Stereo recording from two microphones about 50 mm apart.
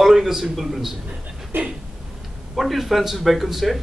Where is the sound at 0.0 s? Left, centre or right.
Centre.